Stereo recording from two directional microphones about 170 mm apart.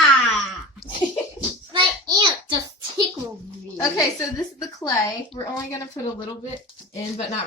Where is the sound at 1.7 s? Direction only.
25° right (ahead or behind).